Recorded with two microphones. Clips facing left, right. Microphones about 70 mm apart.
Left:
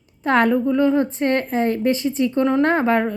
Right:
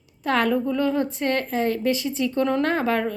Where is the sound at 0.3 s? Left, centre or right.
Left.